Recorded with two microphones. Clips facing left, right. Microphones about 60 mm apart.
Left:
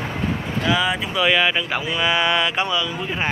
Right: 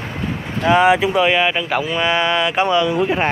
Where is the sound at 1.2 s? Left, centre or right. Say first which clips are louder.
Right 2 dB; right.